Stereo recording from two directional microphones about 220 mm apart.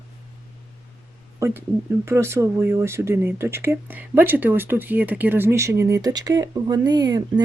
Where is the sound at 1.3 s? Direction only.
10° right (ahead or behind).